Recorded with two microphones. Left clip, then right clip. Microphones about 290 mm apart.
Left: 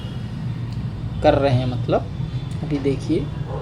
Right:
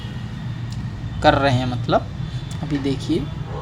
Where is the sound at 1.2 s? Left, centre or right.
Right.